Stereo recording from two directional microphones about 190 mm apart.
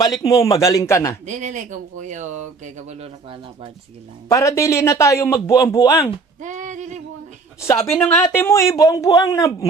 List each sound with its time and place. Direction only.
0.0 s a man's voice: 20° left (ahead or behind)
1.2 s speech: 40° right (ahead or behind)
4.3 s a man's voice: 15° left (ahead or behind)
6.4 s speech: 40° right (ahead or behind)
7.9 s a man's voice: 10° left (ahead or behind)